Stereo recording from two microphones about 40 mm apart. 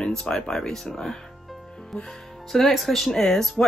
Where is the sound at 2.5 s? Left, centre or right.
Centre.